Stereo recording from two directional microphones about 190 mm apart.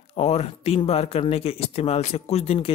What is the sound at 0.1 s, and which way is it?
Speech, 35° left (ahead or behind).